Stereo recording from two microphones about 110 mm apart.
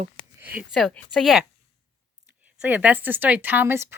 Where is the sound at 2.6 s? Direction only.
15° right (ahead or behind).